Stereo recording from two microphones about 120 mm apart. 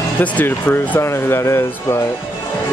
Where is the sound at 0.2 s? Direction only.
10° left (ahead or behind).